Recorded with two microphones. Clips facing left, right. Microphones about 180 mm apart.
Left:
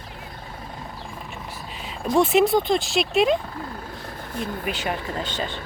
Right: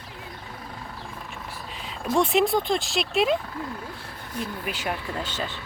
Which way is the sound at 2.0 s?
5° left (ahead or behind).